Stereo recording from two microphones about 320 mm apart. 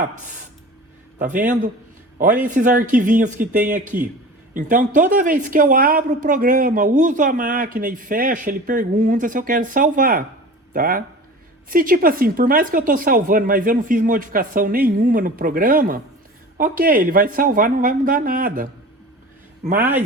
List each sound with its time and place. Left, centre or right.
1.2 s a woman's voice: right